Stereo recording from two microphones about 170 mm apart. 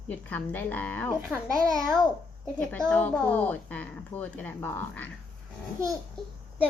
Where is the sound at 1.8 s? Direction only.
Centre (ahead or behind).